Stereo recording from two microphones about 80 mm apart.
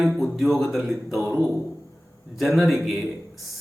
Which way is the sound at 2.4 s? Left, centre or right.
Centre.